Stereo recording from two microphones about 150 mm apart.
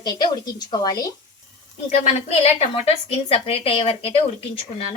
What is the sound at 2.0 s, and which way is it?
A woman's voice, 45° left (ahead or behind).